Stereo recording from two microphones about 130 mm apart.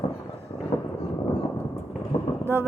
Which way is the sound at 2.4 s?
20° right (ahead or behind).